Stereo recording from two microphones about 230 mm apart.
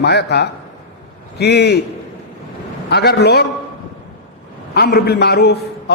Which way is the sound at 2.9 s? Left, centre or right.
Left.